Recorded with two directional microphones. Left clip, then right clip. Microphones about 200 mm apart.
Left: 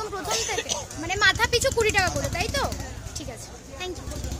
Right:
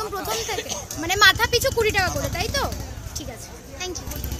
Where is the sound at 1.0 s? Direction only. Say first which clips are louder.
Right 5 dB; 15° right (ahead or behind).